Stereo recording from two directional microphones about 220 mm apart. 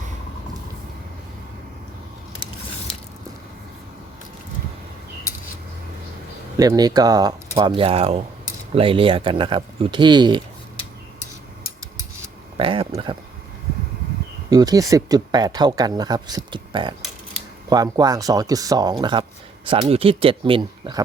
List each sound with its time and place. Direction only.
6.6 s speech: 15° right (ahead or behind)
12.5 s a sound: 25° right (ahead or behind)
14.5 s speech: 15° right (ahead or behind)